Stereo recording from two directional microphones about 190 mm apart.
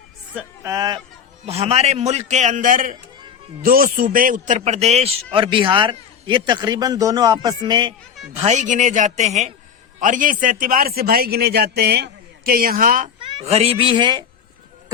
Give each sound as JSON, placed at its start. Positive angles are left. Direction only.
{"t": 0.3, "sound": "speech", "side_deg": -15}
{"t": 1.5, "sound": "a man's voice", "side_deg": -30}
{"t": 13.1, "sound": "speech", "side_deg": -25}